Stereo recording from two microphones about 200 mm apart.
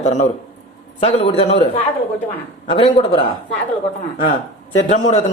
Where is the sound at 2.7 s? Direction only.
30° left (ahead or behind).